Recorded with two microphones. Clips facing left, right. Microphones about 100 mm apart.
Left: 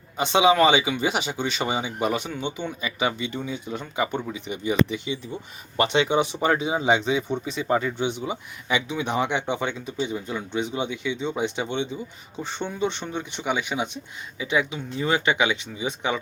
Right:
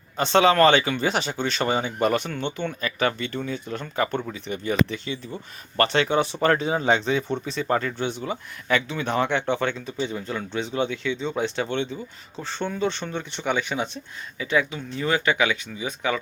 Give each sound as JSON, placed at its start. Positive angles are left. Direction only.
{"t": 0.2, "sound": "speech", "side_deg": 10}